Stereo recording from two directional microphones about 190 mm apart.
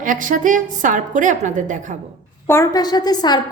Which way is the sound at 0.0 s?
45° right (ahead or behind).